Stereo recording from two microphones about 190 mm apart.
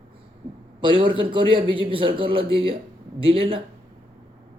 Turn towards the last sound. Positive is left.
turn(degrees=-30)  # may be behind; listen again after turning